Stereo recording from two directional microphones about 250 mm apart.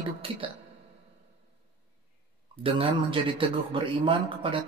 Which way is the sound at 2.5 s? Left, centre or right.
Right.